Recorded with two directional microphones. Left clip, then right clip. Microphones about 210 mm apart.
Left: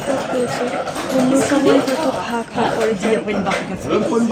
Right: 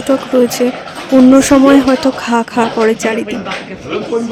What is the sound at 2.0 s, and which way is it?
Speech, 55° right (ahead or behind).